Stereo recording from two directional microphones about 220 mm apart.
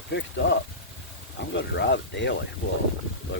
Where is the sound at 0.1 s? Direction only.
55° left (ahead or behind).